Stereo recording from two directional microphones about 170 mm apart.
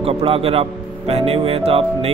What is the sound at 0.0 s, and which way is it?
A man's voice, 35° right (ahead or behind).